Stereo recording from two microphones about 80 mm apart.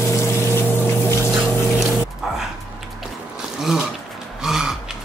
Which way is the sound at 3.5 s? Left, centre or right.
Centre.